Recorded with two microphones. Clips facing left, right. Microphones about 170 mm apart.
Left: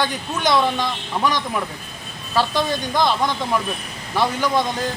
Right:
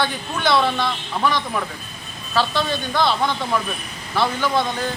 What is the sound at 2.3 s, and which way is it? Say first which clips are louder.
Speech: left 1 dB; 15° left (ahead or behind).